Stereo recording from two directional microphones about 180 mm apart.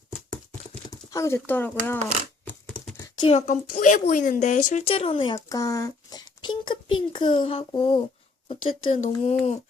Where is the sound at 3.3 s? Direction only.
40° left (ahead or behind).